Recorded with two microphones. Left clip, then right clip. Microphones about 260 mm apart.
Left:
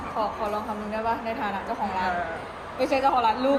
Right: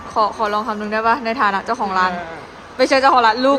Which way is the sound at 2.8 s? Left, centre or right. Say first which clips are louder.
Right 9 dB; right.